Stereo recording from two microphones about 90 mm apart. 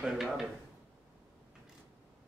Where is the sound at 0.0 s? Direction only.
5° right (ahead or behind).